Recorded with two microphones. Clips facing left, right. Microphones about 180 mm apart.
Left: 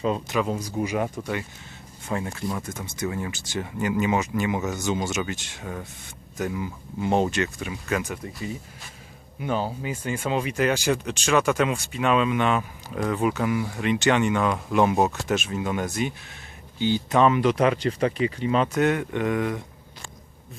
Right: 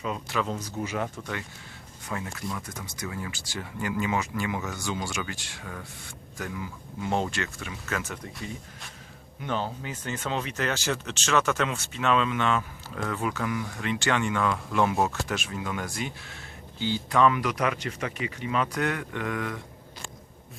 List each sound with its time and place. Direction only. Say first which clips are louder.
0.3 s speech: left 4 dB; 10° left (ahead or behind)
2.0 s speech: left 5 dB; 30° left (ahead or behind)